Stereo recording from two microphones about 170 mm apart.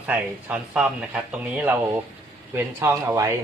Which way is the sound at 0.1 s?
10° right (ahead or behind).